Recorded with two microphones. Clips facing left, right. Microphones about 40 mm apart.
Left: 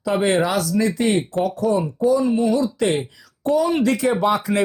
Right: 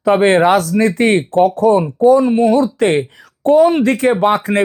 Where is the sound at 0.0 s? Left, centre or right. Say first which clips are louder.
Right 8 dB; right.